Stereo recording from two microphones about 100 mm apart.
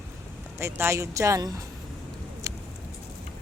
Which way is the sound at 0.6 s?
25° right (ahead or behind).